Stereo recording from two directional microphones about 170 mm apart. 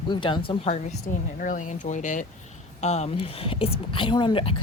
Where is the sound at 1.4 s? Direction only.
50° left (ahead or behind).